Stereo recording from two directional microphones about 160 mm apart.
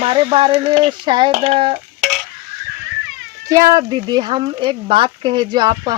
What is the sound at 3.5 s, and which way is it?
Speech, 20° right (ahead or behind).